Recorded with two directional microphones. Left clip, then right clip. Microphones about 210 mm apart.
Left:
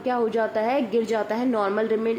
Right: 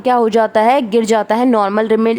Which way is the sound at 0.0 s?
35° right (ahead or behind).